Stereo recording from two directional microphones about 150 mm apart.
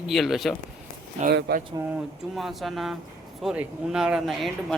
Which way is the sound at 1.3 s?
90° right.